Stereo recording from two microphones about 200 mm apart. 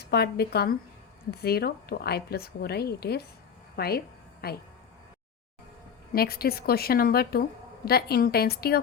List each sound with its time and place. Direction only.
0.0 s a woman's voice: 55° left (ahead or behind)
3.8 s a sound: 50° left (ahead or behind)
6.1 s a woman's voice: 50° left (ahead or behind)